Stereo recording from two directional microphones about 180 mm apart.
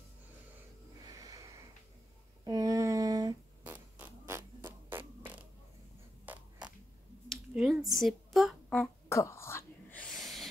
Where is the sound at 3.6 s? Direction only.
10° right (ahead or behind).